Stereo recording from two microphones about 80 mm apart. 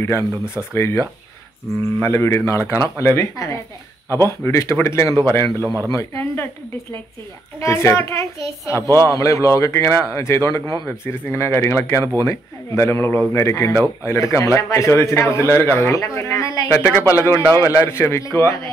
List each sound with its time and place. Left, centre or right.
0.2 s speech: right
0.7 s speech: left
7.6 s speech: left
12.0 s speech: right
12.3 s speech: left
16.6 s speech: left